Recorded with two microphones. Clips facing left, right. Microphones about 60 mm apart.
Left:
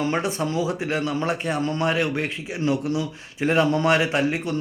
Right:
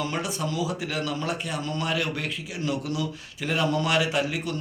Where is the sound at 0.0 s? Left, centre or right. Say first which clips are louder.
Left 5 dB; left.